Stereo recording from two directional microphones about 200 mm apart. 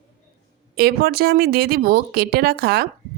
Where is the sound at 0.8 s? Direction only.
50° right (ahead or behind).